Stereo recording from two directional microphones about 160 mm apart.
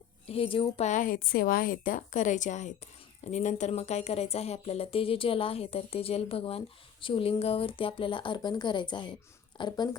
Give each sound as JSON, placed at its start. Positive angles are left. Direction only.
{"t": 0.3, "sound": "a woman's voice", "side_deg": 35}
{"t": 0.9, "sound": "a woman's voice", "side_deg": 55}